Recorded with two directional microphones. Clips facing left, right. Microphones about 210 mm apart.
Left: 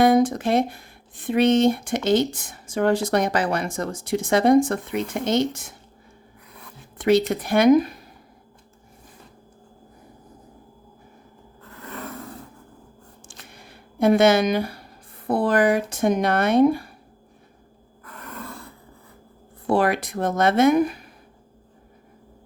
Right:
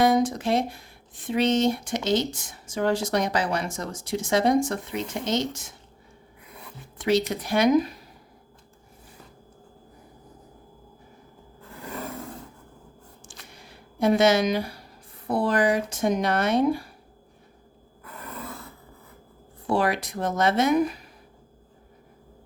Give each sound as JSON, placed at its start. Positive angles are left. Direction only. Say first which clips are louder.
{"t": 0.0, "sound": "speech", "louder": "left 4 dB", "side_deg": 55}
{"t": 7.0, "sound": "speech", "louder": "left 5 dB", "side_deg": 55}
{"t": 12.0, "sound": "a sound", "louder": "even", "side_deg": -10}
{"t": 13.2, "sound": "a sound", "louder": "left 2 dB", "side_deg": 55}
{"t": 15.3, "sound": "speech", "louder": "left 3 dB", "side_deg": 55}
{"t": 18.0, "sound": "roar", "louder": "left 1 dB", "side_deg": -5}
{"t": 19.6, "sound": "speech", "louder": "left 4 dB", "side_deg": 55}